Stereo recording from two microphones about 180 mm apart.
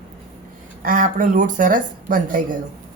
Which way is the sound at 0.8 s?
50° right (ahead or behind).